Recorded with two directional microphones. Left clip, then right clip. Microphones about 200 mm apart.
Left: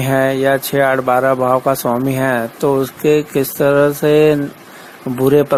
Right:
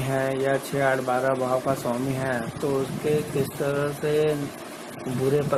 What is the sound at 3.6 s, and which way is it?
Speech, 40° left (ahead or behind).